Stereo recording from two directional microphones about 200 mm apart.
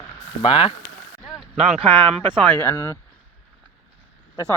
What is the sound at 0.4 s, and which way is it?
Speech, 25° left (ahead or behind).